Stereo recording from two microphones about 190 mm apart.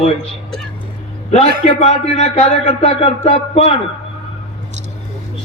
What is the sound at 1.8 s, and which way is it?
A man's voice, 35° left (ahead or behind).